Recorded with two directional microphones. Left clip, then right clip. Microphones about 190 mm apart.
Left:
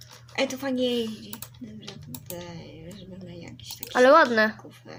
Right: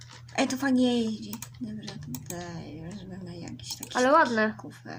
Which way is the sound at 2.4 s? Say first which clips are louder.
Right 1 dB; 50° right (ahead or behind).